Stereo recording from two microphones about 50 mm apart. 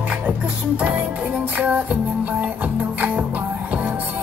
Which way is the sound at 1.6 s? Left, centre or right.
Right.